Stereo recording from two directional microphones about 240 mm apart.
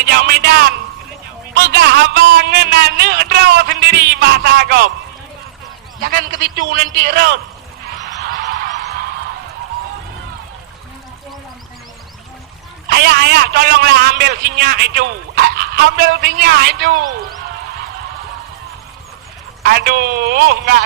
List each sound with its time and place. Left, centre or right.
0.0 s a sound: right
1.5 s a man's voice: right
6.0 s a man's voice: right
8.2 s a sound: right
12.9 s a man's voice: right
19.6 s a man's voice: right